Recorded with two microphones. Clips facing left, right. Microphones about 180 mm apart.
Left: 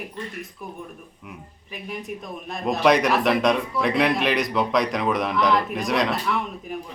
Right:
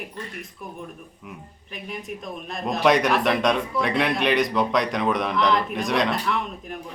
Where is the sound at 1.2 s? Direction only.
Centre (ahead or behind).